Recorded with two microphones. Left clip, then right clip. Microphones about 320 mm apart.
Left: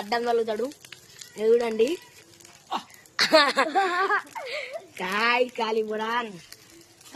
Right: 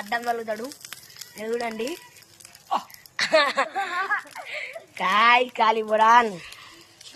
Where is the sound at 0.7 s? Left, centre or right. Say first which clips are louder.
Right 3 dB; centre.